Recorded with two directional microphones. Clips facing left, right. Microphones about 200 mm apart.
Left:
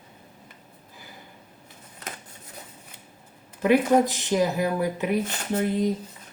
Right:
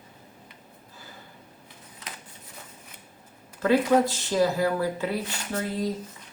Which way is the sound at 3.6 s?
15° left (ahead or behind).